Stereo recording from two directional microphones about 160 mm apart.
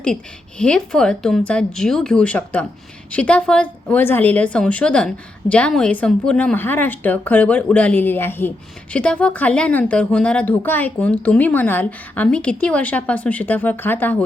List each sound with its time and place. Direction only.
0.6 s speech: 5° left (ahead or behind)